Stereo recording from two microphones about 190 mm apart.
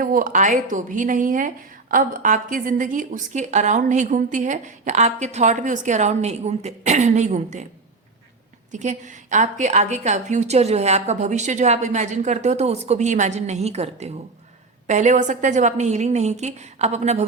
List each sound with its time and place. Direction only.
0.0 s a woman's voice: 45° right (ahead or behind)
8.7 s a woman's voice: 40° right (ahead or behind)